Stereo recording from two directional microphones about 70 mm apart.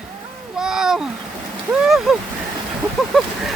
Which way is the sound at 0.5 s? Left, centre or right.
Centre.